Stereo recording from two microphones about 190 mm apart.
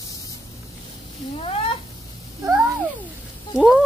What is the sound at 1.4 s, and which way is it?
Cat, 30° left (ahead or behind).